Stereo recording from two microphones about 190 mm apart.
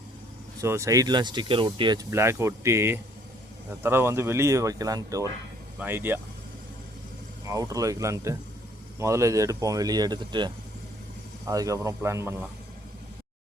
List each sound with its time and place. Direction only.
0.6 s speech: 15° right (ahead or behind)
2.0 s speech: 15° right (ahead or behind)
7.4 s speech: 20° right (ahead or behind)